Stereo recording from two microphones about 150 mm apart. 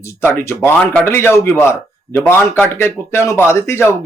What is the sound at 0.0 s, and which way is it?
Speech, 15° left (ahead or behind).